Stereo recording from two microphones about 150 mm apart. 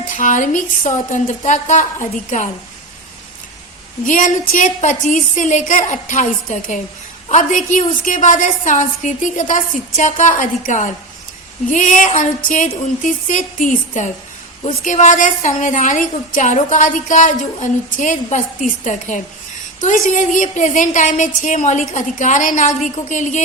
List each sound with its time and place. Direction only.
0.1 s a woman's voice: 60° left (ahead or behind)
4.0 s a woman's voice: 60° left (ahead or behind)